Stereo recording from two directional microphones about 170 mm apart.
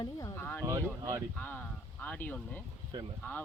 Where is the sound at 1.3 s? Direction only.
10° left (ahead or behind).